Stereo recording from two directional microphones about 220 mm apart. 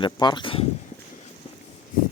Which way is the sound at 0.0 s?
20° left (ahead or behind).